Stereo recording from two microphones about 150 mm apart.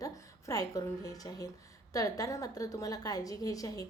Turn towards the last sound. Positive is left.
turn(degrees=25)  # may be behind; listen again after turning